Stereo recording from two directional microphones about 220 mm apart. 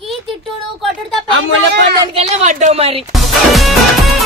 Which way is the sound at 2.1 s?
30° right (ahead or behind).